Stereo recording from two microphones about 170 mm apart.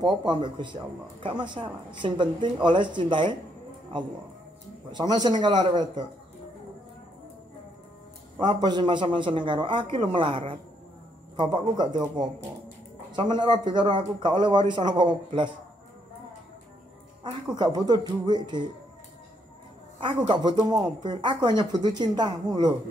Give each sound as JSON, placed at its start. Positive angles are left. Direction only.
{"t": 0.0, "sound": "speech", "side_deg": -25}
{"t": 2.0, "sound": "speech", "side_deg": -30}
{"t": 4.9, "sound": "speech", "side_deg": -25}
{"t": 8.4, "sound": "speech", "side_deg": -25}
{"t": 17.2, "sound": "speech", "side_deg": -25}
{"t": 20.3, "sound": "speech", "side_deg": -25}